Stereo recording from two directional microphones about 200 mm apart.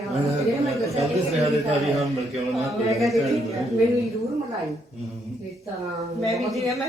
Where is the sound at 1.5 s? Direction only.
Centre (ahead or behind).